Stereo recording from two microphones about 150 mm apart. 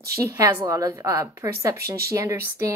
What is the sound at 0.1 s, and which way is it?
Speech, 20° right (ahead or behind).